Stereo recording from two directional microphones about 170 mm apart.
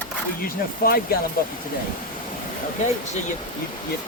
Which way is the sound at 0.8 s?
60° left (ahead or behind).